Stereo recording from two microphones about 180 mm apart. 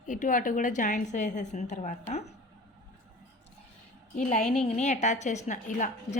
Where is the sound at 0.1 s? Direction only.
45° left (ahead or behind).